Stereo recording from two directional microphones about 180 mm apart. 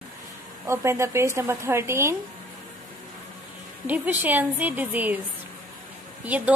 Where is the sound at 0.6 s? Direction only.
15° right (ahead or behind).